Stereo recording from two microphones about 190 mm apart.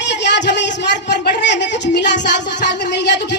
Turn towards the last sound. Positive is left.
turn(degrees=65)  # may be behind; listen again after turning